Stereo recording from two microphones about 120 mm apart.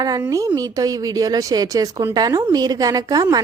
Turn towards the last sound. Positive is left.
turn(degrees=-30)  # may be behind; listen again after turning